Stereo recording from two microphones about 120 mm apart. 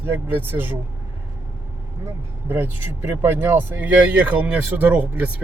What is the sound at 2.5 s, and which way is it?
Speech, 15° right (ahead or behind).